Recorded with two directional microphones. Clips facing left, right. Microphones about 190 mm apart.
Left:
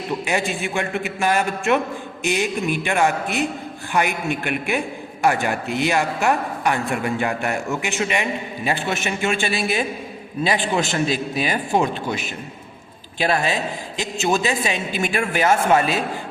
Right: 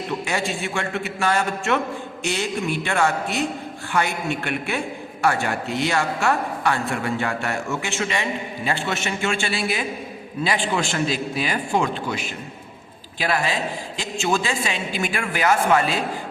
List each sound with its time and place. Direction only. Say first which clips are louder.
0.3 s a man's voice: left 2 dB; 15° left (ahead or behind)